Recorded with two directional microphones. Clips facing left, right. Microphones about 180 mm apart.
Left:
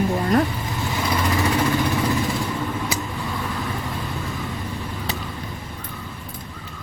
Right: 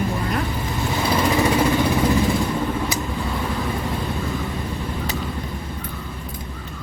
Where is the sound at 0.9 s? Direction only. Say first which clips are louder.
Right 3 dB; 20° right (ahead or behind).